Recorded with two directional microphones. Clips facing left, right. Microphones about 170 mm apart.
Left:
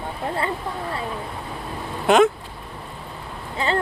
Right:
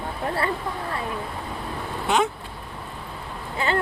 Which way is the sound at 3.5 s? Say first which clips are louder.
Left 1 dB; 35° left (ahead or behind).